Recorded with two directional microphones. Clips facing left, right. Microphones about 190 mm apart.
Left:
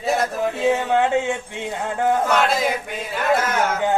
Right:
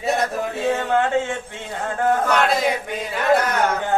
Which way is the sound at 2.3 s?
Centre (ahead or behind).